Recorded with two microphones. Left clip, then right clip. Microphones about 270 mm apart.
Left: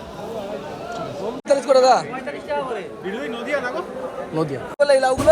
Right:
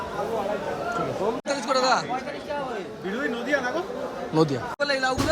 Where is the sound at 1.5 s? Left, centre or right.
Centre.